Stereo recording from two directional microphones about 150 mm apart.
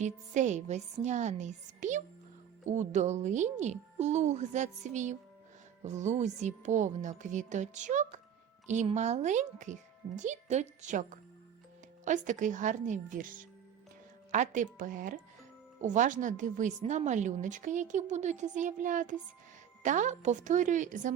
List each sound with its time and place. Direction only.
0.0 s a woman's voice: 50° right (ahead or behind)